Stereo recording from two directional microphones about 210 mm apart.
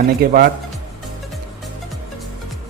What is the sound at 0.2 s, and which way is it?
Speech, 45° right (ahead or behind).